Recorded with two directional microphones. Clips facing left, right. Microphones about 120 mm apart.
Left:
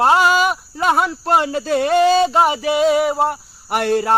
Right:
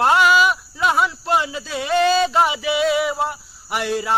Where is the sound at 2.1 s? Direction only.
40° left (ahead or behind).